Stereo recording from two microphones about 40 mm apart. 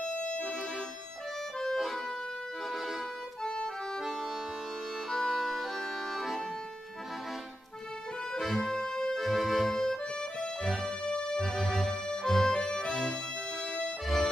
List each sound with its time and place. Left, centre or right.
1.6 s accordion: centre
3.4 s accordion: left
5.1 s accordion: centre
8.5 s organ: centre
9.2 s music: centre
11.1 s music: centre
11.4 s music: centre
14.0 s accordion: centre